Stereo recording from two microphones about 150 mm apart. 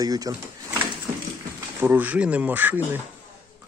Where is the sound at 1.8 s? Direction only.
10° right (ahead or behind).